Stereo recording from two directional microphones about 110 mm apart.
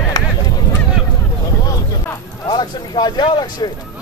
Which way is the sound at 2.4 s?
40° left (ahead or behind).